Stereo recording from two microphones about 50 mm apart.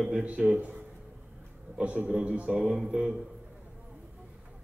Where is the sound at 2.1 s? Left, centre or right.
Centre.